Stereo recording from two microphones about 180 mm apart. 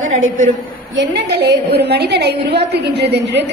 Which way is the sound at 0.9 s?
80° right.